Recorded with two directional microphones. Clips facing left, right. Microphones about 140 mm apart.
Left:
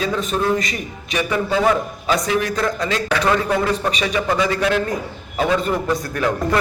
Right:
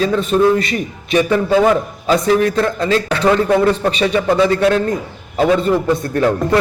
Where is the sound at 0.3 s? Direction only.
30° right (ahead or behind).